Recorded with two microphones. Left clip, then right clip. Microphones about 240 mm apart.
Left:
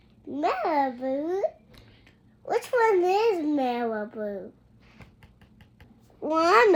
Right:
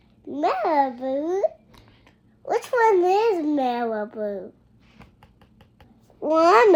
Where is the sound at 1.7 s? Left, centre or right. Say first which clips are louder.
Right 1 dB; centre.